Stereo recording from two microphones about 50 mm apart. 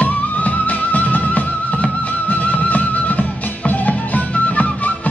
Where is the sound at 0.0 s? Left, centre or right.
Left.